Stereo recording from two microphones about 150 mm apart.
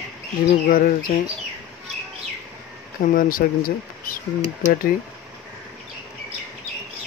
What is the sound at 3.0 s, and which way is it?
Speech, 65° left (ahead or behind).